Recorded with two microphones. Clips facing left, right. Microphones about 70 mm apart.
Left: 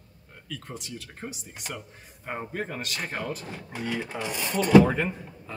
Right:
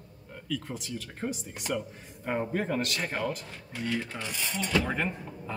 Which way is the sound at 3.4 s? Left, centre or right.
Left.